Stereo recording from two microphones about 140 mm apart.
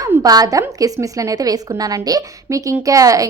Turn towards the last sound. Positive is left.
turn(degrees=-25)  # may be behind; listen again after turning